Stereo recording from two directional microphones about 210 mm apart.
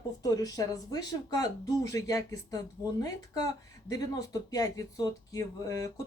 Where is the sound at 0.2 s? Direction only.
15° left (ahead or behind).